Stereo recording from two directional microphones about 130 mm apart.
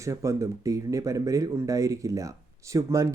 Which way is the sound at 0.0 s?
25° right (ahead or behind).